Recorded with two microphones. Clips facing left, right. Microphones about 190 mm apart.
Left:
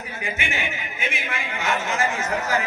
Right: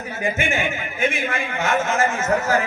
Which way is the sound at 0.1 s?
45° right (ahead or behind).